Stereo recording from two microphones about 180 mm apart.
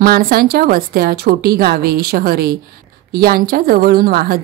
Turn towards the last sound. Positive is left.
turn(degrees=-55)  # may be behind; listen again after turning